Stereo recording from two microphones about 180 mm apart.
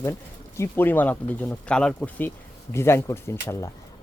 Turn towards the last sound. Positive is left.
turn(degrees=15)  # may be behind; listen again after turning